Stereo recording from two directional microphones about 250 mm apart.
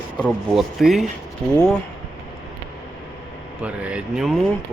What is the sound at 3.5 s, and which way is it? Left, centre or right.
Speech, centre.